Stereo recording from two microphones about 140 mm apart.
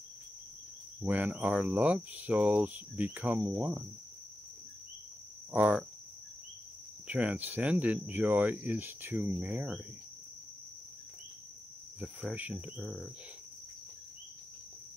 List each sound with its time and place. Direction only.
1.0 s speech: 10° right (ahead or behind)
5.5 s speech: 10° right (ahead or behind)
7.1 s speech: 10° right (ahead or behind)
12.0 s speech: 10° right (ahead or behind)